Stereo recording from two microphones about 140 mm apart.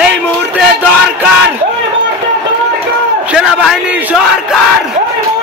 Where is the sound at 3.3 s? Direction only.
5° right (ahead or behind).